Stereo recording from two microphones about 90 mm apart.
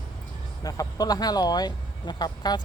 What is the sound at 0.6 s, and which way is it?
Speech, 45° left (ahead or behind).